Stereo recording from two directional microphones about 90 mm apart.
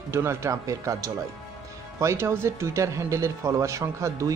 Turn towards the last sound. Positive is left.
turn(degrees=-35)  # may be behind; listen again after turning